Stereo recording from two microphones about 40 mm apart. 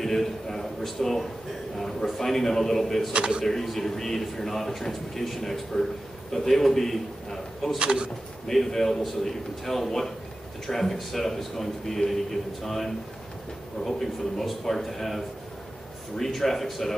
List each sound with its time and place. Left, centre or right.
0.0 s a man's voice: centre
3.1 s speech: right
3.4 s a man's voice: centre
7.8 s speech: right
8.5 s a man's voice: centre